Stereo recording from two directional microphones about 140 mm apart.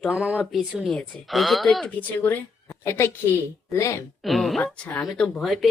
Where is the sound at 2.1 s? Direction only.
15° left (ahead or behind).